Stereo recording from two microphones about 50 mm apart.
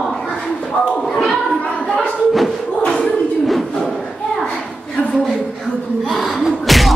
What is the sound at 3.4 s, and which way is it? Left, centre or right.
Bird, centre.